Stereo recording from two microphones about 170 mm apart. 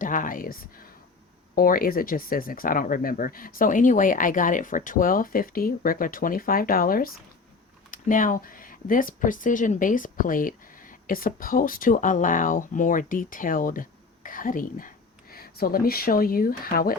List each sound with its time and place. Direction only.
0.0 s speech: 55° left (ahead or behind)
1.5 s speech: 55° left (ahead or behind)